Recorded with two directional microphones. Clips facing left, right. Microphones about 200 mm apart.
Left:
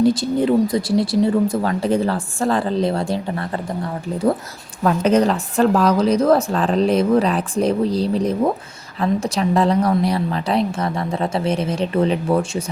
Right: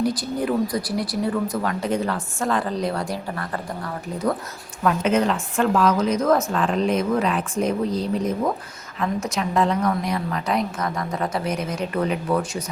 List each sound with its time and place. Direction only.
0.0 s a woman's voice: 25° left (ahead or behind)
4.8 s a woman's voice: 35° left (ahead or behind)